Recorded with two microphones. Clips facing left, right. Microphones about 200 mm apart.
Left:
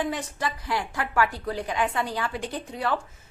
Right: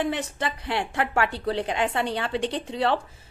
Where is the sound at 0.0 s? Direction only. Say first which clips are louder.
Right 2 dB; 25° right (ahead or behind).